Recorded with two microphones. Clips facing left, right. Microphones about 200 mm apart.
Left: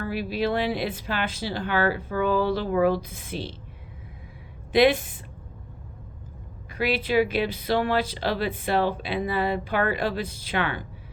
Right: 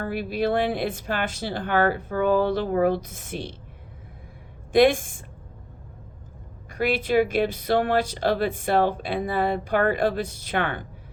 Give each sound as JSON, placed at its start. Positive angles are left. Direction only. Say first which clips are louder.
{"t": 0.0, "sound": "speech", "louder": "right 1 dB", "side_deg": -50}
{"t": 4.7, "sound": "speech", "louder": "right 2 dB", "side_deg": -45}
{"t": 6.7, "sound": "speech", "louder": "right 2 dB", "side_deg": -45}